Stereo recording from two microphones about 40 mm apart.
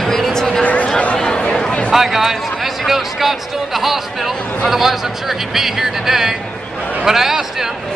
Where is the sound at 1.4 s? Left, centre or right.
Left.